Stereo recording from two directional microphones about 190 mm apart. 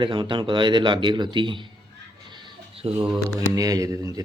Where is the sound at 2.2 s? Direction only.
25° right (ahead or behind).